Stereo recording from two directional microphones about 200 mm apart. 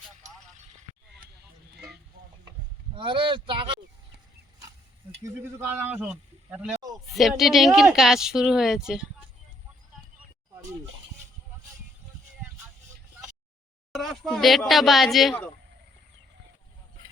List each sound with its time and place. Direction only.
0.5 s a sound: 35° right (ahead or behind)
2.9 s speech: 25° right (ahead or behind)
5.2 s a woman's voice: 10° right (ahead or behind)
13.9 s a woman's voice: centre (ahead or behind)